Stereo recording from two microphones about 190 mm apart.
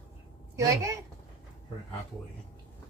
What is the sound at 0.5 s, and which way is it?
Speech, 15° right (ahead or behind).